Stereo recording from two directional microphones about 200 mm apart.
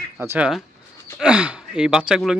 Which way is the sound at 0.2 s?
10° right (ahead or behind).